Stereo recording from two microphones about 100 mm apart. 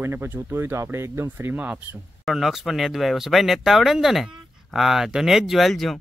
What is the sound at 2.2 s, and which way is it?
Speech, centre (ahead or behind).